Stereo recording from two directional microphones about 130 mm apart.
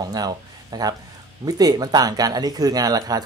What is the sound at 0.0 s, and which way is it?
Speech, 30° right (ahead or behind).